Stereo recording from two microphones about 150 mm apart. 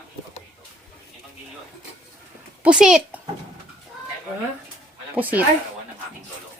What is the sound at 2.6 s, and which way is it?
Speech, 5° right (ahead or behind).